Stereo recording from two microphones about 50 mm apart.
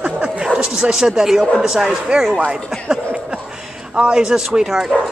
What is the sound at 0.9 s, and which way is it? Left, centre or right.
Speech, centre.